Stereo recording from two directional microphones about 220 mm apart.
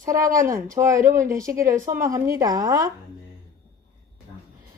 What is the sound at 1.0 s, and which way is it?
Speech, 40° right (ahead or behind).